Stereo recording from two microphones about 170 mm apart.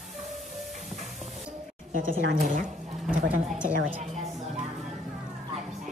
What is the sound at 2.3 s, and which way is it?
Speech, 55° right (ahead or behind).